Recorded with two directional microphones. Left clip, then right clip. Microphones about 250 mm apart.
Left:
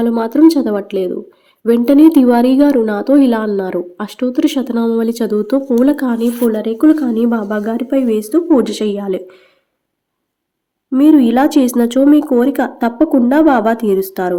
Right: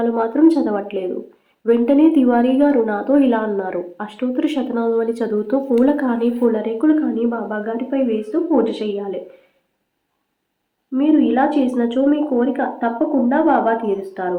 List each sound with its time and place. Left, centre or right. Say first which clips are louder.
0.0 s a woman's voice: left 4 dB; left
10.9 s a woman's voice: left 6 dB; left